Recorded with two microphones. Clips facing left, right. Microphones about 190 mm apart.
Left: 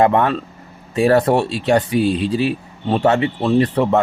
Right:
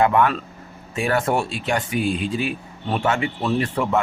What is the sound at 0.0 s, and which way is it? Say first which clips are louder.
Speech: left 3 dB; 30° left (ahead or behind).